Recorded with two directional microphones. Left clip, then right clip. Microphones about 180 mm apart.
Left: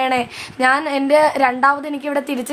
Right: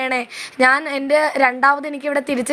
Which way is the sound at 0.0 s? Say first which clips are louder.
Left 3 dB; 15° right (ahead or behind).